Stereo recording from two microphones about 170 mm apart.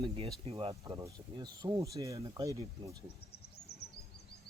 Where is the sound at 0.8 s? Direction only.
20° right (ahead or behind).